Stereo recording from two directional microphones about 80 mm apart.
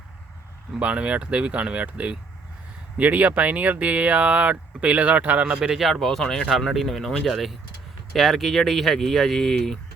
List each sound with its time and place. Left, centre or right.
0.8 s speech: centre